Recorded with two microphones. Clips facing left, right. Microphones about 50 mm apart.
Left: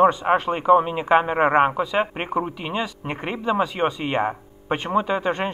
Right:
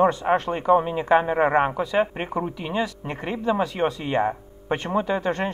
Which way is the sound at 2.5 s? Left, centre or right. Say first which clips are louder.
Right 1 dB; left.